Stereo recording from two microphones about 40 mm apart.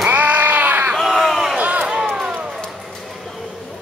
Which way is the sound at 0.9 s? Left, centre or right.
Centre.